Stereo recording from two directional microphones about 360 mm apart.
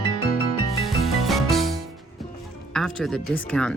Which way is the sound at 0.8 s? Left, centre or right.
Centre.